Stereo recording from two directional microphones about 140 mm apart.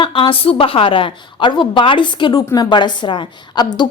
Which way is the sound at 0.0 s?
40° left (ahead or behind).